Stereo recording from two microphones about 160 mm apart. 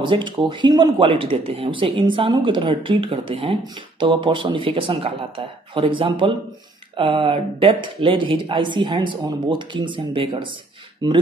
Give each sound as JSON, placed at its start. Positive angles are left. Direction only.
{"t": 0.0, "sound": "speech", "side_deg": -30}